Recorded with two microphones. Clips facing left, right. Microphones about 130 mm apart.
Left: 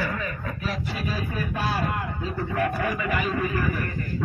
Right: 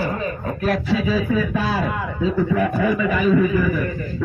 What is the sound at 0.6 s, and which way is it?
Speech, 55° right (ahead or behind).